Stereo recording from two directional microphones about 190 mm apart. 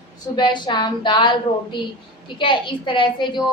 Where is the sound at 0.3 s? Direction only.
25° left (ahead or behind).